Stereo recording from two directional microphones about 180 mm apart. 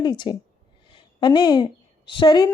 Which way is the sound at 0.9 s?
25° left (ahead or behind).